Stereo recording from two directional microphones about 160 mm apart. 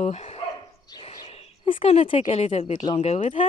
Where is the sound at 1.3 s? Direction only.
35° left (ahead or behind).